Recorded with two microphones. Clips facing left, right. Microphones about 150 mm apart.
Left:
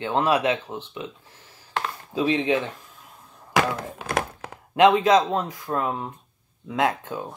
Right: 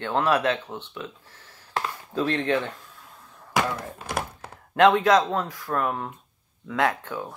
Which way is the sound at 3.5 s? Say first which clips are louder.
Left 3 dB; 90° left.